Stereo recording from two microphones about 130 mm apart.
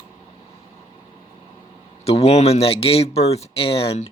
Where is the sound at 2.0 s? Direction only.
55° left (ahead or behind).